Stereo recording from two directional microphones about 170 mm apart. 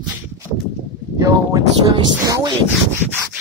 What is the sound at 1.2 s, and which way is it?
Speech, 20° right (ahead or behind).